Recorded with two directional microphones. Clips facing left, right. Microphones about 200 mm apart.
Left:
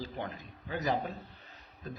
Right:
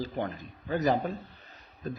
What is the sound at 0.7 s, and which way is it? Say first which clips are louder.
Speech: right 7 dB; 45° right (ahead or behind).